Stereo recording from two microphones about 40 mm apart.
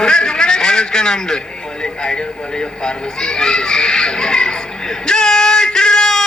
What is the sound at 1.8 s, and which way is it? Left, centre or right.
Music, centre.